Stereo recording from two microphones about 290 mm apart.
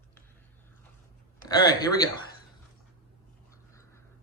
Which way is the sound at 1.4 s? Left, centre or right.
Centre.